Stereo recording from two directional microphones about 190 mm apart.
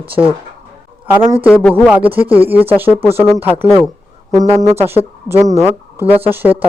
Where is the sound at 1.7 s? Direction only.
10° right (ahead or behind).